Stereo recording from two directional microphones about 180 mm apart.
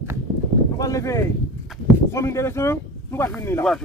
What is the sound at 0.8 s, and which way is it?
Speech, 20° left (ahead or behind).